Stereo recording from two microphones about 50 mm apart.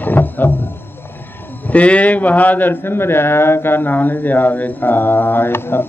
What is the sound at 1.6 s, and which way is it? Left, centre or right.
A man's voice, left.